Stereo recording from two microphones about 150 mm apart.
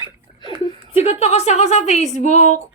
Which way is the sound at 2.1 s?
50° left (ahead or behind).